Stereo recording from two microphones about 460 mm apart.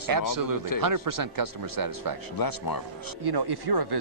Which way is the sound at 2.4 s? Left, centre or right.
Left.